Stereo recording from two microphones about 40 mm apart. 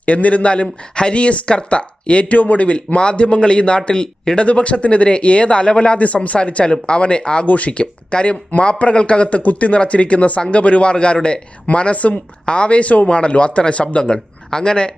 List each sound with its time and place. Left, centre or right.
0.0 s speech: left; by 4.4 s centre
4.4 s speech: left
7.4 s speech: left
14.0 s speech: centre